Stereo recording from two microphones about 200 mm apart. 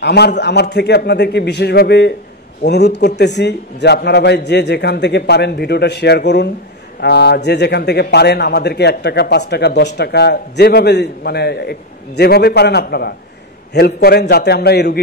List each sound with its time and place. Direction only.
0.0 s a man's voice: 55° left (ahead or behind)